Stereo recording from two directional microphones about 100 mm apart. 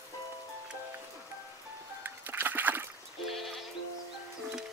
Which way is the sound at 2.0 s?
20° right (ahead or behind).